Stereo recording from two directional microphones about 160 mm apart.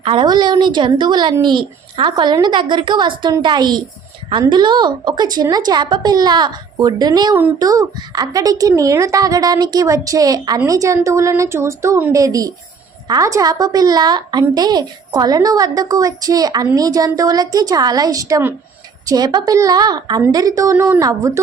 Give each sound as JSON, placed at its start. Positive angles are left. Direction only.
{"t": 0.0, "sound": "a woman's voice", "side_deg": -30}